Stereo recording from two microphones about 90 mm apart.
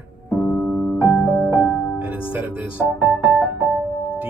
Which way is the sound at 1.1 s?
30° left (ahead or behind).